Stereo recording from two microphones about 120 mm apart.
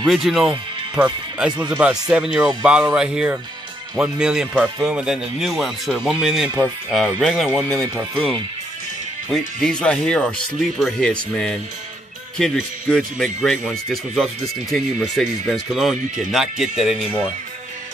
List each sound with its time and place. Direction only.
0.0 s a man's voice: centre (ahead or behind)
7.8 s speech: 20° right (ahead or behind)
9.3 s a man's voice: 5° left (ahead or behind)